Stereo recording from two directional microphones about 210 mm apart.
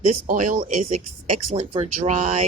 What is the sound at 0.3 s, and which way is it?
Speech, 40° right (ahead or behind).